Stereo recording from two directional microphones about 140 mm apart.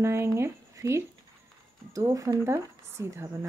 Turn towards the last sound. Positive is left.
turn(degrees=-20)  # may be behind; listen again after turning